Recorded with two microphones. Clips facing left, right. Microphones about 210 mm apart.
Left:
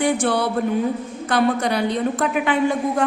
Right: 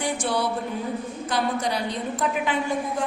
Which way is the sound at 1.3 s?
60° left (ahead or behind).